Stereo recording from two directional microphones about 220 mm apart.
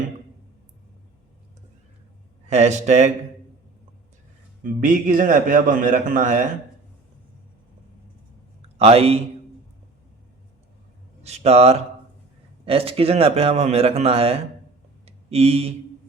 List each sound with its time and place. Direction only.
2.5 s a man's voice: 30° right (ahead or behind)
4.6 s a man's voice: 40° right (ahead or behind)
8.8 s a man's voice: 25° right (ahead or behind)
11.2 s a man's voice: 30° right (ahead or behind)
15.0 s a sound: 30° right (ahead or behind)